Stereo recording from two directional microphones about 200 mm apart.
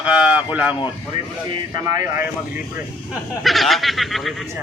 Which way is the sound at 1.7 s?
15° right (ahead or behind).